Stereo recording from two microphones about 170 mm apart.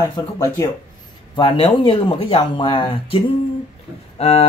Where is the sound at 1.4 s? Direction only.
35° left (ahead or behind).